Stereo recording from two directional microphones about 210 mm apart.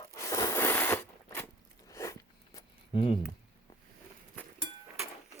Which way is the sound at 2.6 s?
25° left (ahead or behind).